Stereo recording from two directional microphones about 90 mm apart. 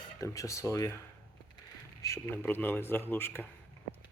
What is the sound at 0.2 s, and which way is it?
Speech, 35° left (ahead or behind).